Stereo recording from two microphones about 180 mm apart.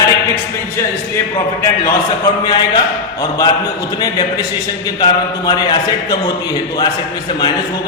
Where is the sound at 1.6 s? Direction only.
15° left (ahead or behind).